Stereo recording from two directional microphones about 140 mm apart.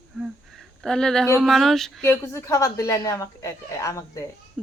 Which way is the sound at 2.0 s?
20° left (ahead or behind).